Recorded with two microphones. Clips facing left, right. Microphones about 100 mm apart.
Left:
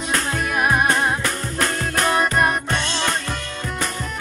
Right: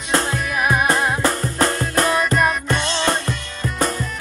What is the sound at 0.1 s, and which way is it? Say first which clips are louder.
Music: right 3 dB; 30° right (ahead or behind).